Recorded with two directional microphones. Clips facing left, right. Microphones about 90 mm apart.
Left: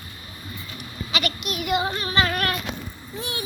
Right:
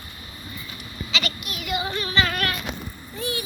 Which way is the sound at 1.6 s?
50° left (ahead or behind).